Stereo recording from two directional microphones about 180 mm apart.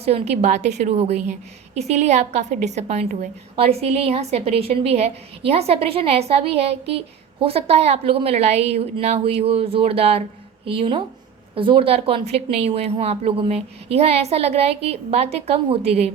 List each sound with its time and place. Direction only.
0.0 s a woman's voice: 35° right (ahead or behind)